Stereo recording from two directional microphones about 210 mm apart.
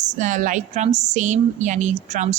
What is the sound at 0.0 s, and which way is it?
A woman's voice, 35° right (ahead or behind).